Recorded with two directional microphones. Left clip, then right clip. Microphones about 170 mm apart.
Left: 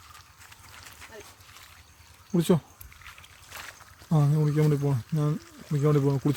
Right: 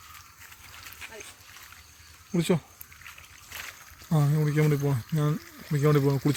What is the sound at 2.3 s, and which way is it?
Speech, 30° left (ahead or behind).